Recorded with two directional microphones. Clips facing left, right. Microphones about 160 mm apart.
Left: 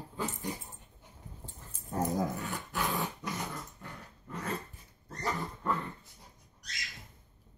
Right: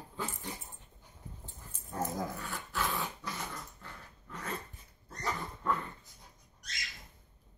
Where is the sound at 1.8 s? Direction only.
15° left (ahead or behind).